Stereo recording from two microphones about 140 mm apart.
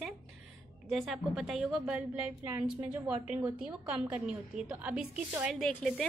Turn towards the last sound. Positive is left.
turn(degrees=0)  # may be behind; listen again after turning